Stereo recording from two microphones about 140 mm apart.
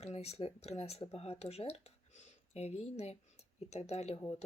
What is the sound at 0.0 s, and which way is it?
Speech, 50° left (ahead or behind).